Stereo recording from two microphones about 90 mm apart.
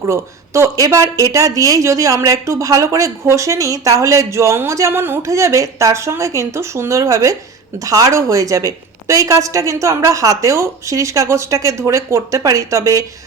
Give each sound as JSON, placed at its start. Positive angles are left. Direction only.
{"t": 0.0, "sound": "speech", "side_deg": -30}